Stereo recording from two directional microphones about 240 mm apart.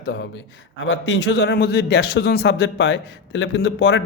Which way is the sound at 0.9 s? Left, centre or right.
Left.